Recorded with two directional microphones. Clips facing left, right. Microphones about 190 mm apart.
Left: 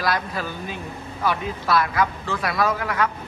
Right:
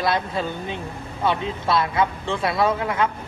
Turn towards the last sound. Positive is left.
turn(degrees=-25)  # may be behind; listen again after turning